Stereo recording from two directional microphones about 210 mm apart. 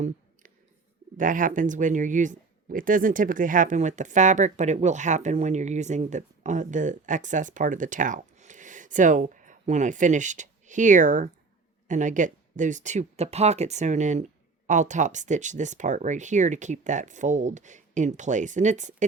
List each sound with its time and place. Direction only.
1.1 s speech: 40° right (ahead or behind)